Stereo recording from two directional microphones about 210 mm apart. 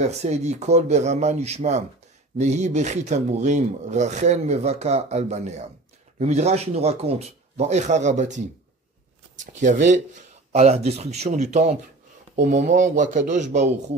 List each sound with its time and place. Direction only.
0.0 s speech: 35° right (ahead or behind)
9.4 s speech: 35° right (ahead or behind)